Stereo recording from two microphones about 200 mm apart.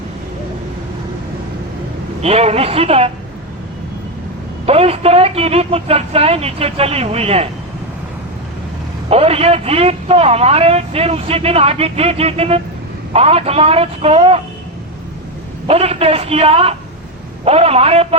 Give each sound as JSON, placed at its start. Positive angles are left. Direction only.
{"t": 2.2, "sound": "speech", "side_deg": -30}
{"t": 4.6, "sound": "a man's voice", "side_deg": -30}
{"t": 9.0, "sound": "a man's voice", "side_deg": -30}
{"t": 15.6, "sound": "a man's voice", "side_deg": -30}